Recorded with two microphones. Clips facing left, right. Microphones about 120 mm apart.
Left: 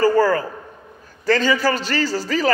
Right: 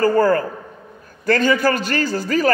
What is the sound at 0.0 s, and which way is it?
A man's voice, 50° right (ahead or behind).